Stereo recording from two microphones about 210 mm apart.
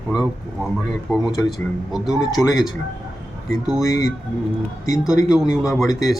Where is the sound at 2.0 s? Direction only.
15° left (ahead or behind).